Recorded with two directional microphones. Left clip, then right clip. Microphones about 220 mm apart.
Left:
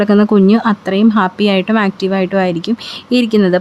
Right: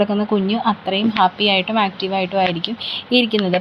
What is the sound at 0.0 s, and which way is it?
Speech, 45° left (ahead or behind).